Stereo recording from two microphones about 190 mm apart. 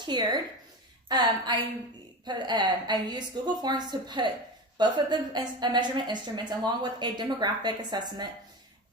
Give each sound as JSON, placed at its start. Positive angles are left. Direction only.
{"t": 0.0, "sound": "a woman's voice", "side_deg": -25}